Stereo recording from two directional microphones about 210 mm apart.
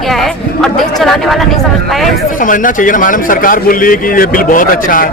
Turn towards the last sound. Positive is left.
turn(degrees=40)  # may be behind; listen again after turning